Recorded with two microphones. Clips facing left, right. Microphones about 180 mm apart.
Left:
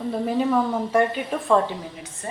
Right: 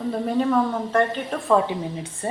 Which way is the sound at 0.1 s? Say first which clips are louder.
Even; 5° left (ahead or behind).